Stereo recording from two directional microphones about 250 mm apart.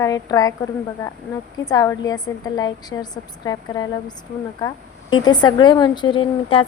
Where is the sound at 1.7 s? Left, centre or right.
Centre.